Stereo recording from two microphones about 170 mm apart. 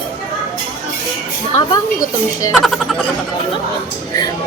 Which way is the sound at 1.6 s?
25° left (ahead or behind).